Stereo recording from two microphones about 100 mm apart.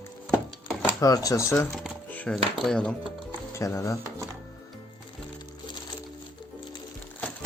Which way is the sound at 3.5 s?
30° left (ahead or behind).